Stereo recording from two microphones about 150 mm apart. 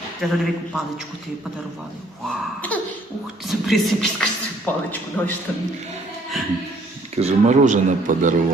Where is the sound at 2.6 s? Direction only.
10° left (ahead or behind).